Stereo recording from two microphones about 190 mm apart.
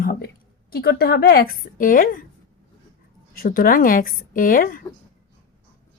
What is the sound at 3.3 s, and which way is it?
A woman's voice, 50° left (ahead or behind).